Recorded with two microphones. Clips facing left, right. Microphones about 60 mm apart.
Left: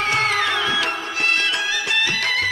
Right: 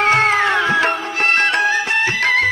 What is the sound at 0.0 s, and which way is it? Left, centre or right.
Music, right.